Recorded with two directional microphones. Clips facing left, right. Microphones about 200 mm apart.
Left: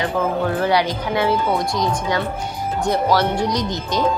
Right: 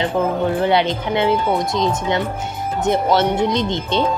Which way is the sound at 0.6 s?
25° right (ahead or behind).